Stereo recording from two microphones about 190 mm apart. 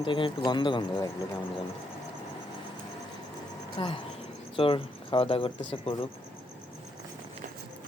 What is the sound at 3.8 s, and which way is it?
Speech, 30° left (ahead or behind).